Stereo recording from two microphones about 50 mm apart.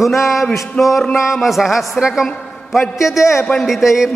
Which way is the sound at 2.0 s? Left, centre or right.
Centre.